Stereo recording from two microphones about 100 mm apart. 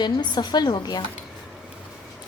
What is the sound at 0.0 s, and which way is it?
Music, 45° left (ahead or behind).